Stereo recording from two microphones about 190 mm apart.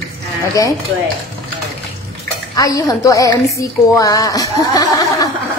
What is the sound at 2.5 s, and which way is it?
A woman's voice, 20° left (ahead or behind).